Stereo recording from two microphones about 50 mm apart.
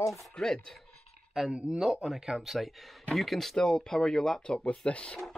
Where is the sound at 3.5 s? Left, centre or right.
Centre.